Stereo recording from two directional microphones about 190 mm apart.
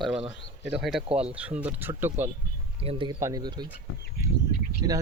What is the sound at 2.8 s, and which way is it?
Speech, 30° right (ahead or behind).